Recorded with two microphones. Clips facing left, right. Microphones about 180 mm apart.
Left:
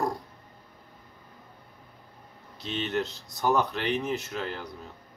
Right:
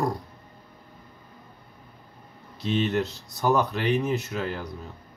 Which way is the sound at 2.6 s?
5° right (ahead or behind).